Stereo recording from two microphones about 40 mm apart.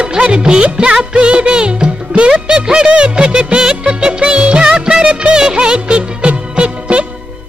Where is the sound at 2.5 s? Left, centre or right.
Right.